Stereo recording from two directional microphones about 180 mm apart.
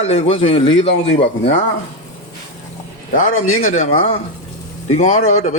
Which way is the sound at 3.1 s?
40° left (ahead or behind).